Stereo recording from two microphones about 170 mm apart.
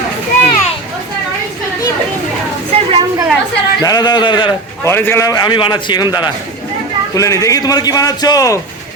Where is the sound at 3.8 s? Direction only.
25° left (ahead or behind).